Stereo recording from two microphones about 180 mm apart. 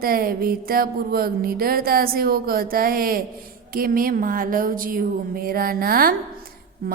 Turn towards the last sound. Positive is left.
turn(degrees=-55)  # may be behind; listen again after turning